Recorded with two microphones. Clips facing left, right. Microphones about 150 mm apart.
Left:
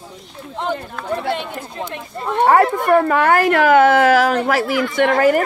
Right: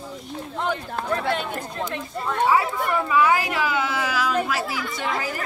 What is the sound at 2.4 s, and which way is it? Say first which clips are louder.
A woman's voice: left 8 dB; 60° left (ahead or behind).